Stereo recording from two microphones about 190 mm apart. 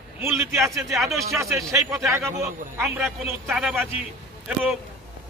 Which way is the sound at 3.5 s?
5° right (ahead or behind).